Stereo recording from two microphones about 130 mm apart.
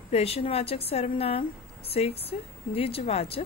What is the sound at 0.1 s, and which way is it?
A woman's voice, 50° left (ahead or behind).